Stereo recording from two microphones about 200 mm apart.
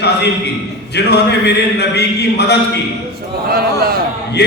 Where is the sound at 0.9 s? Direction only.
55° left (ahead or behind).